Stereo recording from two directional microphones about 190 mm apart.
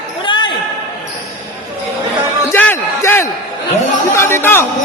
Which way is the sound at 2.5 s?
10° left (ahead or behind).